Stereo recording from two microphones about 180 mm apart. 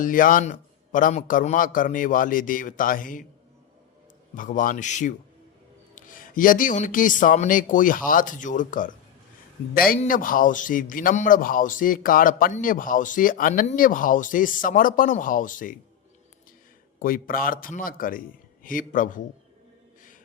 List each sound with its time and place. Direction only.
0.0 s speech: 50° left (ahead or behind)
4.4 s speech: 50° left (ahead or behind)
17.0 s speech: 50° left (ahead or behind)